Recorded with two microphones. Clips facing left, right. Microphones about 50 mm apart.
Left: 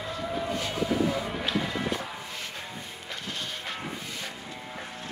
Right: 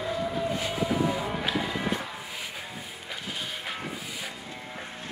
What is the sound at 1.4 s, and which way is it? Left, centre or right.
Music, centre.